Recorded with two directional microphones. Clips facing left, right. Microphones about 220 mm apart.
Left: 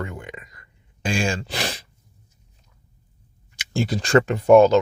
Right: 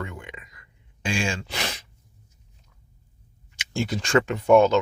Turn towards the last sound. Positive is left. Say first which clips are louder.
# left 4 dB
turn(degrees=35)  # may be behind; listen again after turning